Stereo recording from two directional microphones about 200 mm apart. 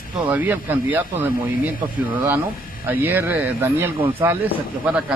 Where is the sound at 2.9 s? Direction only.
10° right (ahead or behind).